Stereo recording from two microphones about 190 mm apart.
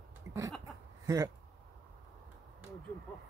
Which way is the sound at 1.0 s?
15° right (ahead or behind).